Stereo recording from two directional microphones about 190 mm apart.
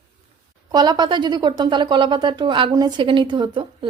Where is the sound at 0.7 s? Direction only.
20° right (ahead or behind).